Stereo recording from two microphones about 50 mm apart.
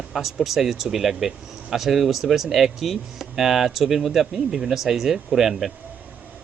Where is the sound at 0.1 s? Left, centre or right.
Centre.